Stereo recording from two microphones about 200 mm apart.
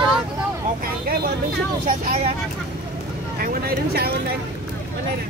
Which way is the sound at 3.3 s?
50° right (ahead or behind).